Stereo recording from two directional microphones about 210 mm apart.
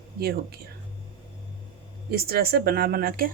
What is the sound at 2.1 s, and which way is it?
Speech, 45° right (ahead or behind).